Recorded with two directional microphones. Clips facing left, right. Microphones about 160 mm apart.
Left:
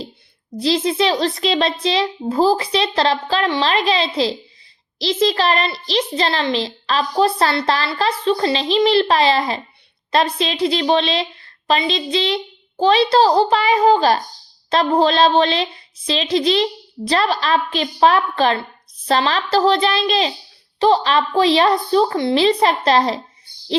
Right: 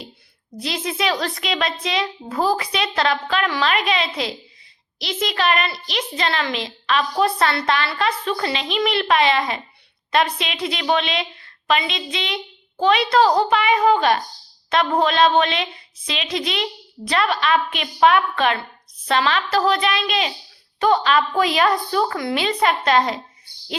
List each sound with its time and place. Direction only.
0.6 s a child's voice: 30° left (ahead or behind)